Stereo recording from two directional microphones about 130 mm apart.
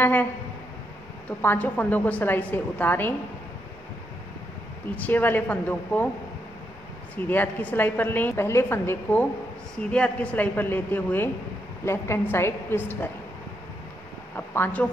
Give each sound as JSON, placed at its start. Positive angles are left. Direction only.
{"t": 0.0, "sound": "a woman's voice", "side_deg": 15}
{"t": 1.4, "sound": "a woman's voice", "side_deg": 15}
{"t": 4.9, "sound": "a woman's voice", "side_deg": 15}
{"t": 7.2, "sound": "a woman's voice", "side_deg": 15}
{"t": 14.3, "sound": "speech", "side_deg": 15}